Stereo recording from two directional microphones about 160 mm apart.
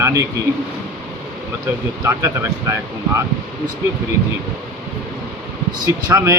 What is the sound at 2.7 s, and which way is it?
Speech, 15° right (ahead or behind).